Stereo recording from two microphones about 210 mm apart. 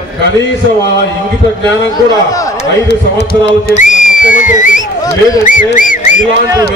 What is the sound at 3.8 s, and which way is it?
Speech, 35° left (ahead or behind).